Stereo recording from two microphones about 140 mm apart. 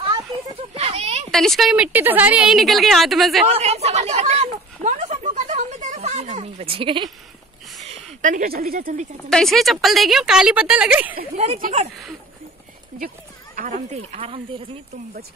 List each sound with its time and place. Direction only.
0.7 s a sound: 45° right (ahead or behind)
1.3 s a woman's voice: centre (ahead or behind)
3.4 s a sound: 50° right (ahead or behind)
6.3 s speech: 45° right (ahead or behind)
7.9 s speech: 65° right (ahead or behind)
9.3 s a woman's voice: 5° left (ahead or behind)
11.3 s speech: 50° right (ahead or behind)
13.6 s speech: 60° right (ahead or behind)